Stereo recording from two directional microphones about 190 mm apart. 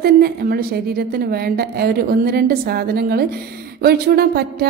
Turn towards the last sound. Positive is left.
turn(degrees=-55)  # may be behind; listen again after turning